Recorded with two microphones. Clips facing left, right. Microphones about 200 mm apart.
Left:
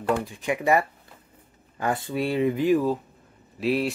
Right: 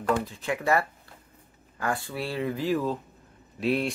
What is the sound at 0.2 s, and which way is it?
Speech, 15° left (ahead or behind).